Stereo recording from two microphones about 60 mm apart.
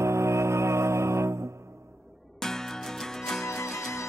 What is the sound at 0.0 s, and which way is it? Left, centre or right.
Music, right.